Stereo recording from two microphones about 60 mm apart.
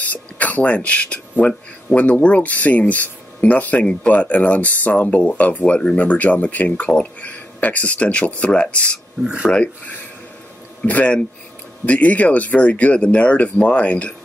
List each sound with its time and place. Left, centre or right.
0.0 s speech: left
10.8 s speech: left